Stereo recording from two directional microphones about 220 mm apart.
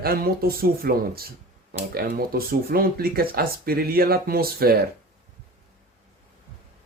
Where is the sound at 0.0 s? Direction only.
45° right (ahead or behind).